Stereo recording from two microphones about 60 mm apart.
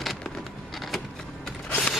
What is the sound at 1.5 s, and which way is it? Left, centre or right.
Creak, centre.